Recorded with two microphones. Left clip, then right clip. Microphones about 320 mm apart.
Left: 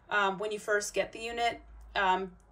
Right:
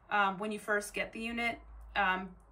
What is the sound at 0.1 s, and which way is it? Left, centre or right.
Speech, centre.